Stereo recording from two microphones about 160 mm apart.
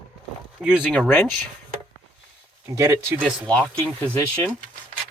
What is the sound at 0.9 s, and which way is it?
Speech, 5° left (ahead or behind).